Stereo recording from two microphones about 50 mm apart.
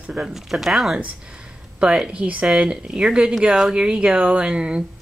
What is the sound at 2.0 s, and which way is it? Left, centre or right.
Speech, right.